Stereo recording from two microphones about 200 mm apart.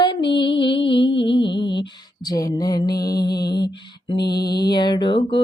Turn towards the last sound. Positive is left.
turn(degrees=25)  # may be behind; listen again after turning